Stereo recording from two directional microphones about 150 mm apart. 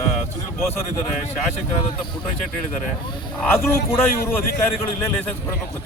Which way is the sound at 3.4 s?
15° left (ahead or behind).